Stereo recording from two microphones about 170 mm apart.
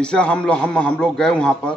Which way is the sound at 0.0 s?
5° left (ahead or behind).